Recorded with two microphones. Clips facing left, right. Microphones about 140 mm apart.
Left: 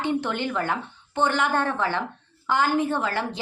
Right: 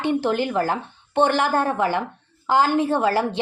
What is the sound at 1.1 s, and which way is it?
Speech, 65° right (ahead or behind).